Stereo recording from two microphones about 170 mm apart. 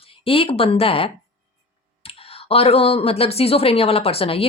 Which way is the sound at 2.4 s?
35° left (ahead or behind).